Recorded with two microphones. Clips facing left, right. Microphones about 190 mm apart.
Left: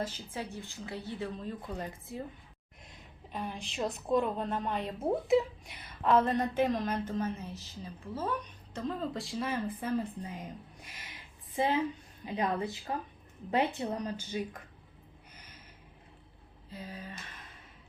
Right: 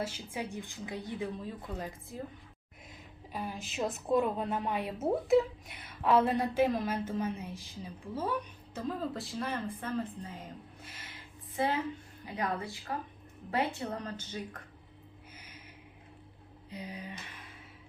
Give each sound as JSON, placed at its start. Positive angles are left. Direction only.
{"t": 0.0, "sound": "a woman's voice", "side_deg": -10}
{"t": 9.8, "sound": "a woman's voice", "side_deg": 15}
{"t": 10.8, "sound": "a sound", "side_deg": 15}
{"t": 11.5, "sound": "a woman's voice", "side_deg": 20}
{"t": 15.4, "sound": "a sound", "side_deg": -10}
{"t": 16.6, "sound": "speech", "side_deg": -15}